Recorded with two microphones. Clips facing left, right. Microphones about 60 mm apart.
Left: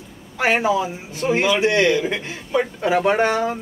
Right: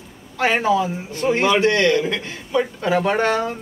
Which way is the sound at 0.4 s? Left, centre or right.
Centre.